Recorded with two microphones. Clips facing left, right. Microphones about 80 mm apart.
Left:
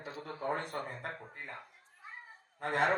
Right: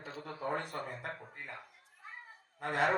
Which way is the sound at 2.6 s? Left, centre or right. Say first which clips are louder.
Left 1 dB; left.